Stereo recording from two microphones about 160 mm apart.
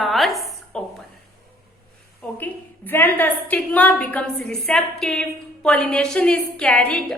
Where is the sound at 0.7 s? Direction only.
5° left (ahead or behind).